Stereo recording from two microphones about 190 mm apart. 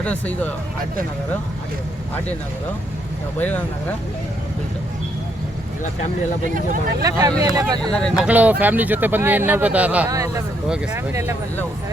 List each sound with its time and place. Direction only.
0.0 s speech: 5° left (ahead or behind)
3.3 s speech: 10° left (ahead or behind)
6.4 s speech: 45° right (ahead or behind)
7.0 s speech: 20° right (ahead or behind)
7.9 s speech: 5° left (ahead or behind)
8.3 s speech: 10° right (ahead or behind)